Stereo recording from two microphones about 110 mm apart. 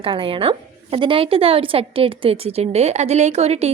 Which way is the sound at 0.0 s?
55° right (ahead or behind).